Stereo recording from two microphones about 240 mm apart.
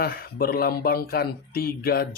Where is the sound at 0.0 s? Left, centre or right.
Left.